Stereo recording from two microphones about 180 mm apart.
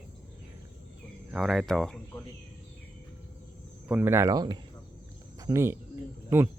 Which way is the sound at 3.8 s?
10° right (ahead or behind).